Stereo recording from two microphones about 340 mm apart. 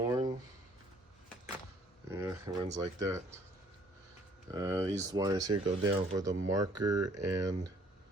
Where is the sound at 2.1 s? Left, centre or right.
Centre.